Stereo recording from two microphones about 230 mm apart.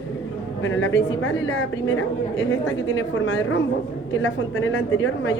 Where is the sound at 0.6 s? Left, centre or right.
Left.